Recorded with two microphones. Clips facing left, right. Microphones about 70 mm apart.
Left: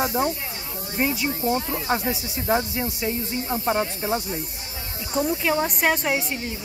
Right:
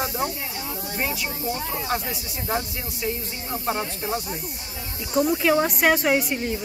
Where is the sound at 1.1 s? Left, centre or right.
Left.